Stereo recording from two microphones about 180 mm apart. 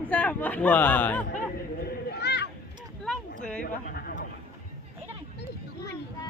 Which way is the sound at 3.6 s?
55° left (ahead or behind).